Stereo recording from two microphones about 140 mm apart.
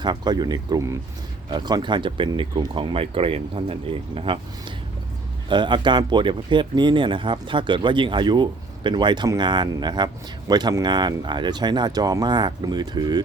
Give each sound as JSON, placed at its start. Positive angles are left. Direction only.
{"t": 0.0, "sound": "speech", "side_deg": -30}
{"t": 5.5, "sound": "speech", "side_deg": -35}